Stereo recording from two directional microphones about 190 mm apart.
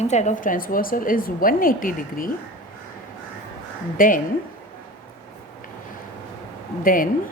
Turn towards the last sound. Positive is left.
turn(degrees=45)  # may be behind; listen again after turning